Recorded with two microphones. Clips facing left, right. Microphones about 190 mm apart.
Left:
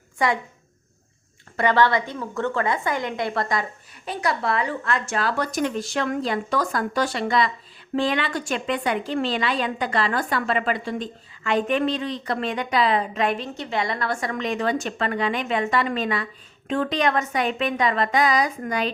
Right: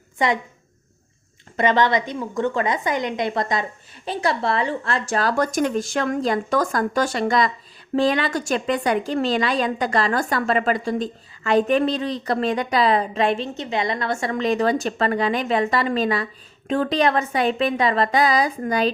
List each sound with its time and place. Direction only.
0.2 s a woman's voice: 20° right (ahead or behind)
1.5 s a woman's voice: 20° right (ahead or behind)